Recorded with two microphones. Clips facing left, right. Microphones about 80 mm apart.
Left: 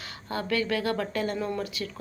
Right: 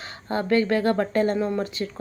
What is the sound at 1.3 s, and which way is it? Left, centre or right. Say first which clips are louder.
Speech: right 6 dB; right.